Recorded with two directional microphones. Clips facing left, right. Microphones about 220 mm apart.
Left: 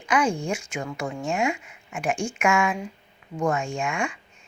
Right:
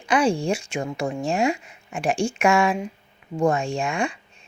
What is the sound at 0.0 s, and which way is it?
Speech, 30° right (ahead or behind).